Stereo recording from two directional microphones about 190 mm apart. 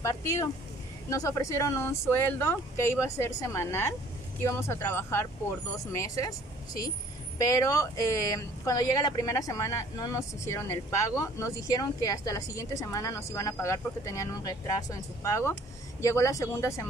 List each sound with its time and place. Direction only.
0.0 s speech: 15° left (ahead or behind)
7.3 s speech: 20° left (ahead or behind)